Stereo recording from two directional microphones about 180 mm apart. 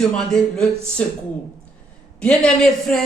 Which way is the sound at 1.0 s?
5° left (ahead or behind).